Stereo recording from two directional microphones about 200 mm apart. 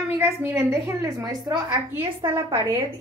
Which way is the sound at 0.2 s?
10° right (ahead or behind).